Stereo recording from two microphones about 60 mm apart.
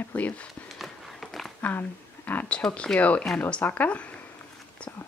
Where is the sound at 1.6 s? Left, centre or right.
Left.